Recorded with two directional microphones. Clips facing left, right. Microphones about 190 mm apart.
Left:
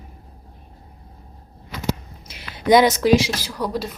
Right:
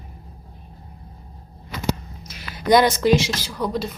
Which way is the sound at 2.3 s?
25° left (ahead or behind).